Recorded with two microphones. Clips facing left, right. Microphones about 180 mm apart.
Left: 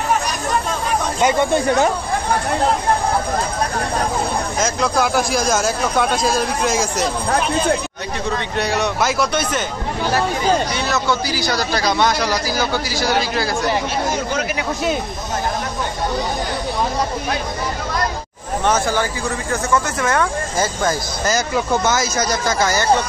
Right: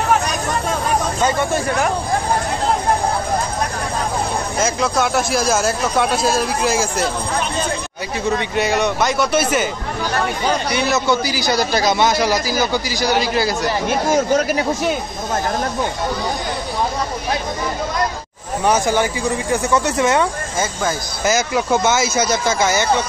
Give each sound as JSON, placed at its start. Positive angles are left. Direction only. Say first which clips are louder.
{"t": 4.6, "sound": "speech", "louder": "right 1 dB", "side_deg": -5}
{"t": 8.5, "sound": "speech", "louder": "right 1 dB", "side_deg": 0}
{"t": 10.9, "sound": "speech", "louder": "right 4 dB", "side_deg": -20}
{"t": 11.8, "sound": "speech", "louder": "right 2 dB", "side_deg": -5}
{"t": 13.8, "sound": "speech", "louder": "right 5 dB", "side_deg": -45}
{"t": 18.7, "sound": "speech", "louder": "right 2 dB", "side_deg": -15}
{"t": 21.5, "sound": "speech", "louder": "right 1 dB", "side_deg": -10}
{"t": 22.6, "sound": "speech", "louder": "even", "side_deg": -20}